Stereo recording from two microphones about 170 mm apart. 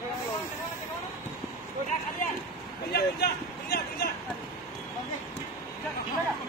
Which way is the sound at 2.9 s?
65° left (ahead or behind).